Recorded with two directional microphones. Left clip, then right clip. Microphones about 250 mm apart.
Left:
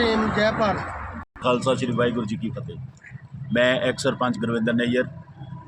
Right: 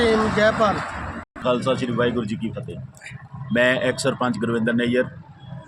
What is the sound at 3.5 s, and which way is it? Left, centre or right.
A man's voice, centre.